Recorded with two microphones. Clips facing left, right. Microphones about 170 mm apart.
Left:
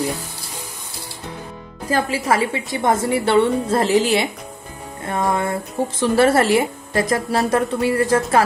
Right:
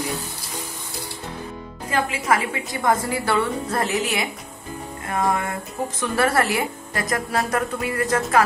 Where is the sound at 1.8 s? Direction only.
35° left (ahead or behind).